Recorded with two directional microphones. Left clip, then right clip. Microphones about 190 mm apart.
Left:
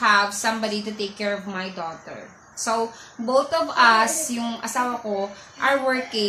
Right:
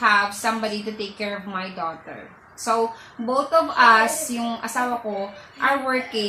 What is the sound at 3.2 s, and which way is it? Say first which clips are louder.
Speech: right 1 dB; 20° left (ahead or behind).